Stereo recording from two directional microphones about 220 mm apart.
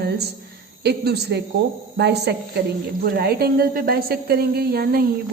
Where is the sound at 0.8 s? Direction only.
45° right (ahead or behind).